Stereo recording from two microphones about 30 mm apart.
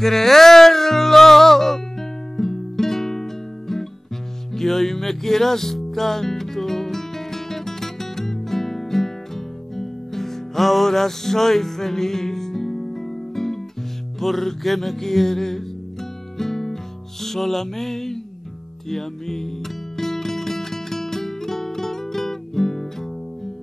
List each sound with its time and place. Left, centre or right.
0.0 s music: centre
10.6 s music: centre
10.9 s music: centre